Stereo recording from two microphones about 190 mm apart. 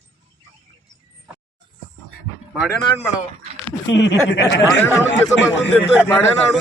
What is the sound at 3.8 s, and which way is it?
Speech, 70° left (ahead or behind).